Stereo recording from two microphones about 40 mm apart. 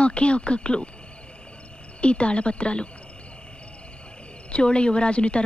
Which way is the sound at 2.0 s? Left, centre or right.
Left.